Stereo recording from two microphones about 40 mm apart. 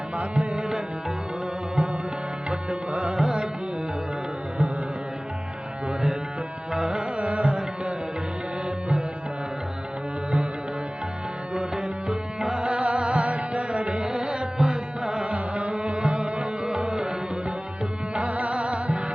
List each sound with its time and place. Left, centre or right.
0.2 s music: centre
2.5 s music: right
3.2 s carnatic music: centre
6.7 s music: centre
7.2 s music: right
12.0 s music: centre
18.1 s music: right